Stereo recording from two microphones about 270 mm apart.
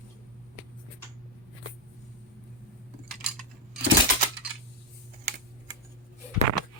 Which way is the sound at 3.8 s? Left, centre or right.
Right.